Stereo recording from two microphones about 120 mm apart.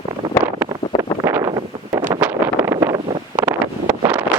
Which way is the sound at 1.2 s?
20° right (ahead or behind).